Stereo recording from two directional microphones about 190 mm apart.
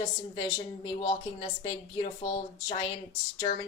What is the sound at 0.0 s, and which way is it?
A woman's voice, 25° left (ahead or behind).